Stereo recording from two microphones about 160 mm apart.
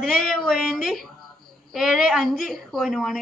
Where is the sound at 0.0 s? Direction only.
Centre (ahead or behind).